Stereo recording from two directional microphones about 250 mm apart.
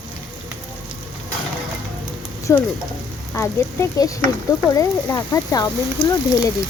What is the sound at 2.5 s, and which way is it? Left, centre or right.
Speech, centre.